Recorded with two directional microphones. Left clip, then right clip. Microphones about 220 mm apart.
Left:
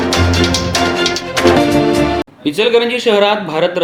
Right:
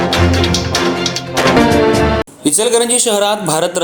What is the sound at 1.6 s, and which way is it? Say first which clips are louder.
Music: right 2 dB; centre (ahead or behind).